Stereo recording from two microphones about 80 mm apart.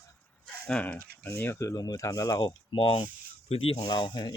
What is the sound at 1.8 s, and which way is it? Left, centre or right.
Speech, left.